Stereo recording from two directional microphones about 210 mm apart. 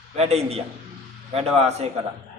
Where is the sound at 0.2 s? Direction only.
30° right (ahead or behind).